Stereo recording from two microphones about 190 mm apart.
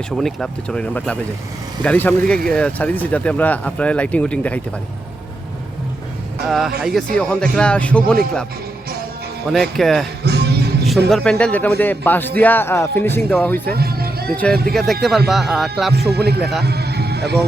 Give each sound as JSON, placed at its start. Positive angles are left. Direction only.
{"t": 0.2, "sound": "speech", "side_deg": 0}
{"t": 6.4, "sound": "speech", "side_deg": 0}
{"t": 9.5, "sound": "speech", "side_deg": 0}
{"t": 10.2, "sound": "music", "side_deg": -60}
{"t": 11.1, "sound": "speech", "side_deg": 5}
{"t": 13.7, "sound": "speech", "side_deg": -55}
{"t": 14.3, "sound": "speech", "side_deg": 5}
{"t": 15.9, "sound": "speech", "side_deg": -60}
{"t": 16.4, "sound": "speech", "side_deg": 0}
{"t": 16.6, "sound": "a sound", "side_deg": -60}